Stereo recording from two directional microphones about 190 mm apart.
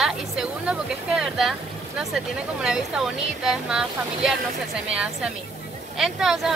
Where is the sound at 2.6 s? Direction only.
5° right (ahead or behind).